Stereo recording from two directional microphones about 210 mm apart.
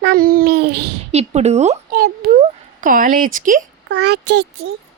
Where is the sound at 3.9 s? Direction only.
50° right (ahead or behind).